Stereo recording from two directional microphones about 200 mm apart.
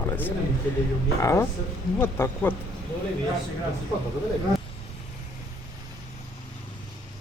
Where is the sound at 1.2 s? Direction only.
15° left (ahead or behind).